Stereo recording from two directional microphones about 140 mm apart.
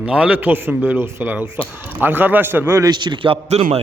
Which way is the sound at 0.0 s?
10° right (ahead or behind).